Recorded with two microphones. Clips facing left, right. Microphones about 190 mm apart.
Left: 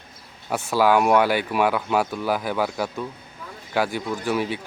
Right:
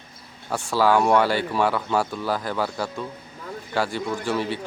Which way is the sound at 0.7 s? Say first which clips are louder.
Left 1 dB; 15° left (ahead or behind).